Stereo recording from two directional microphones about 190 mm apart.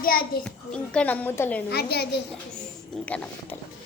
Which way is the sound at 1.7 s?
60° left (ahead or behind).